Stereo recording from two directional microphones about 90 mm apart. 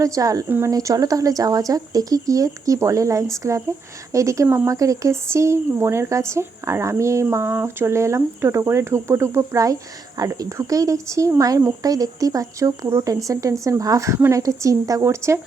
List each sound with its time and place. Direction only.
0.0 s speech: 40° right (ahead or behind)
0.4 s speech: 20° right (ahead or behind)
0.7 s speech: 40° right (ahead or behind)